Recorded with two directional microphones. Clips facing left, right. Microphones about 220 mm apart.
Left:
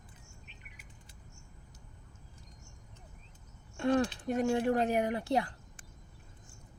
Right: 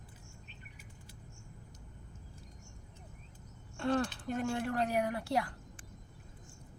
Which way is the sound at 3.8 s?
15° left (ahead or behind).